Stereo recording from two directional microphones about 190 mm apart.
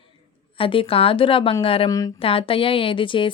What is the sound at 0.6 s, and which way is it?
Speech, 30° left (ahead or behind).